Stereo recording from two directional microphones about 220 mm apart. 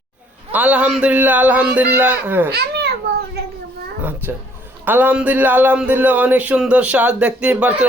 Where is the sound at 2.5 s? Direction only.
50° right (ahead or behind).